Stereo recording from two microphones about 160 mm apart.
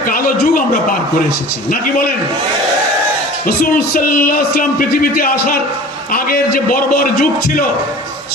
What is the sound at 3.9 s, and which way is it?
Music, 60° left (ahead or behind).